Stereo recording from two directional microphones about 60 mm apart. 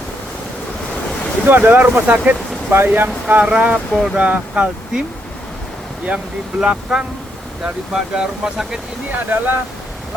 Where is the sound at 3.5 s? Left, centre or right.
Centre.